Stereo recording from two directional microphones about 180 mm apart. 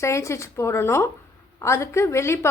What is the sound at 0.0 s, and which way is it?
A woman's voice, 15° left (ahead or behind).